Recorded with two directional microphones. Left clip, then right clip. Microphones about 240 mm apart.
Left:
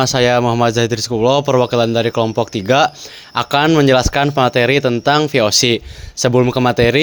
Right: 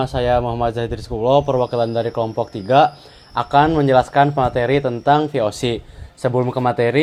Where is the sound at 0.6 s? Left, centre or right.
Left.